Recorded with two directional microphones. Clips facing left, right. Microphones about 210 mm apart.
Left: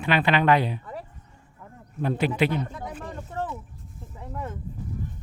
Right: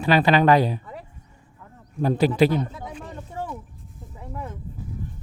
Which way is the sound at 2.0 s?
35° right (ahead or behind).